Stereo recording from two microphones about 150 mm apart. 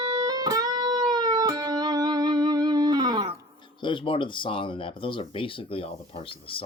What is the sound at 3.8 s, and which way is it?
Speech, 35° left (ahead or behind).